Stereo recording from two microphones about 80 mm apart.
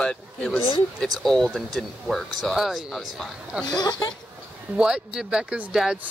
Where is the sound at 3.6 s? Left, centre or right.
Left.